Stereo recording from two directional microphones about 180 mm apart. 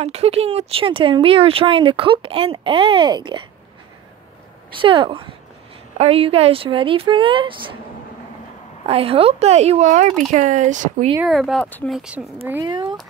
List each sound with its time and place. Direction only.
0.0 s speech: 35° right (ahead or behind)
4.8 s speech: 30° right (ahead or behind)
8.8 s speech: 30° right (ahead or behind)
11.2 s speech: centre (ahead or behind)
12.0 s speech: 5° right (ahead or behind)
12.6 s speech: 25° right (ahead or behind)